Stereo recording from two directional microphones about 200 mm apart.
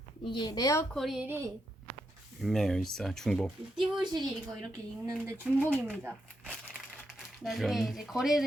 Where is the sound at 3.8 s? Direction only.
20° right (ahead or behind).